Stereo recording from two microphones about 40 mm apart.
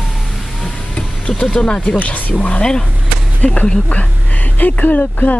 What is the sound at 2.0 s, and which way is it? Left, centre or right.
Speech, left.